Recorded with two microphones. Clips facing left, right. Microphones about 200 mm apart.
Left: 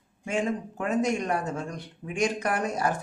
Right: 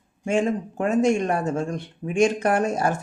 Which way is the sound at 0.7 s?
25° right (ahead or behind).